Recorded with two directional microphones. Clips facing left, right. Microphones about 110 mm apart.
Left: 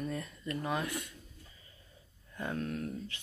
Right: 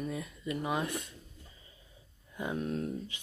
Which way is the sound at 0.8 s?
25° right (ahead or behind).